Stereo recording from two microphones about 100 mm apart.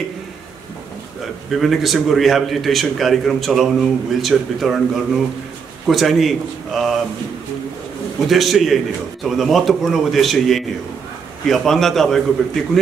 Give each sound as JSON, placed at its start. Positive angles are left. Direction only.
{"t": 1.5, "sound": "a man's voice", "side_deg": 0}
{"t": 8.3, "sound": "a man's voice", "side_deg": 0}